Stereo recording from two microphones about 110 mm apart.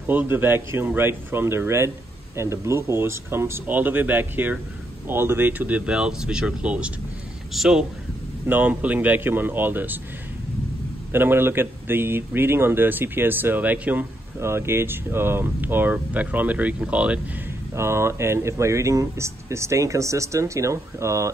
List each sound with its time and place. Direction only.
0.0 s a man's voice: 15° right (ahead or behind)
8.5 s speech: 15° right (ahead or behind)
11.1 s a man's voice: 20° right (ahead or behind)
17.7 s a man's voice: 25° right (ahead or behind)